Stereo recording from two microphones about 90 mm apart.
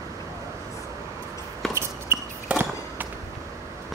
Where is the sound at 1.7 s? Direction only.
30° right (ahead or behind).